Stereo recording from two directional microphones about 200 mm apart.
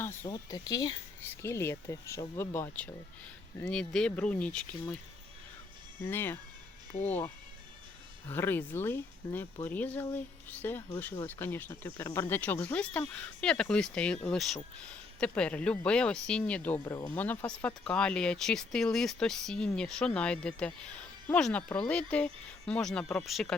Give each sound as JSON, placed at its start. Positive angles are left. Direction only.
{"t": 0.0, "sound": "speech", "side_deg": 15}
{"t": 6.1, "sound": "speech", "side_deg": 10}
{"t": 8.3, "sound": "speech", "side_deg": 10}